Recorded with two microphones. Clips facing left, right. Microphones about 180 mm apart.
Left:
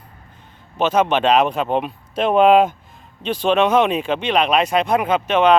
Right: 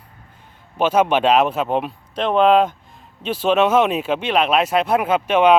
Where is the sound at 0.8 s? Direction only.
10° right (ahead or behind).